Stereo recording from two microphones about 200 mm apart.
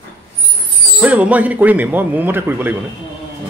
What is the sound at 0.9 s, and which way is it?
A man's voice, 5° right (ahead or behind).